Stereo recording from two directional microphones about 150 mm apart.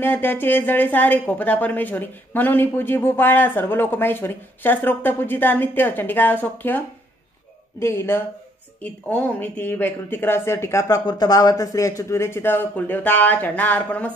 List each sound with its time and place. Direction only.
0.0 s a woman's voice: 15° left (ahead or behind)
7.8 s a woman's voice: 15° left (ahead or behind)